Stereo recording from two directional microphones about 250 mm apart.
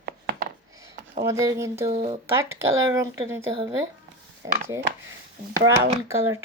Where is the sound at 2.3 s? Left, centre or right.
Centre.